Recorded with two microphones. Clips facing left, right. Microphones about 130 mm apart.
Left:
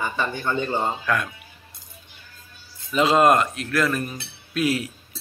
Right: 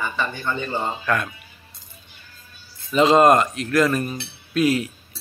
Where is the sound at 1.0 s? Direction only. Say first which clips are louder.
Right 1 dB; centre (ahead or behind).